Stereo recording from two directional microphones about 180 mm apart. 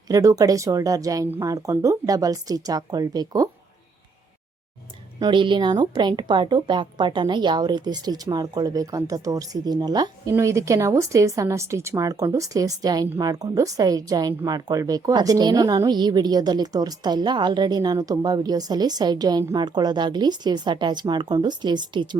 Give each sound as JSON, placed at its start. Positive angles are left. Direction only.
{"t": 0.1, "sound": "a woman's voice", "side_deg": -20}
{"t": 5.2, "sound": "a woman's voice", "side_deg": -25}